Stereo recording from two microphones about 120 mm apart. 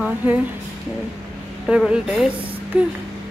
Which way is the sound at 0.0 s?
15° right (ahead or behind).